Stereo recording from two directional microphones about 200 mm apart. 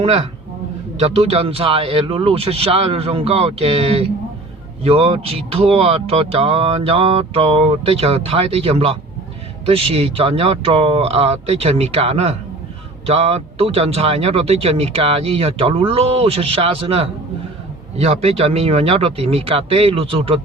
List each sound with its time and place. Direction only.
0.9 s speech: 30° right (ahead or behind)